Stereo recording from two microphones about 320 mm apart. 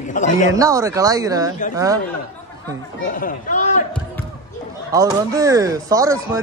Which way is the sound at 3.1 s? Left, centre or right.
Left.